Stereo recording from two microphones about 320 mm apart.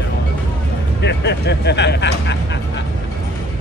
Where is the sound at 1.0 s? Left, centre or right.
Left.